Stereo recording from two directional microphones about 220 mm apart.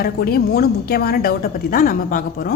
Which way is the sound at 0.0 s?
45° left (ahead or behind).